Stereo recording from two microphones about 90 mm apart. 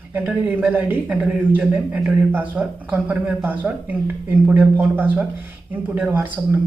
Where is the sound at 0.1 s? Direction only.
15° right (ahead or behind).